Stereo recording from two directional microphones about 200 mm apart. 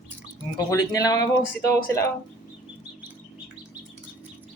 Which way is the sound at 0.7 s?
20° left (ahead or behind).